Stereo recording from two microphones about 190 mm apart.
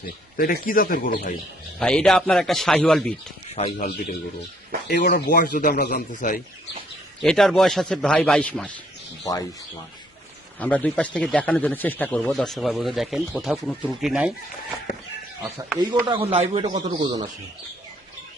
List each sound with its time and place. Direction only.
0.3 s a man's voice: 50° left (ahead or behind)
1.8 s speech: 5° left (ahead or behind)
3.5 s speech: 35° left (ahead or behind)
4.9 s a man's voice: 50° left (ahead or behind)
7.2 s speech: centre (ahead or behind)
9.2 s speech: 20° left (ahead or behind)
10.6 s speech: 5° left (ahead or behind)
15.8 s speech: 25° right (ahead or behind)